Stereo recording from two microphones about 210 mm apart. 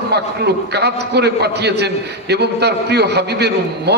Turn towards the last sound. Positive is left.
turn(degrees=-50)  # may be behind; listen again after turning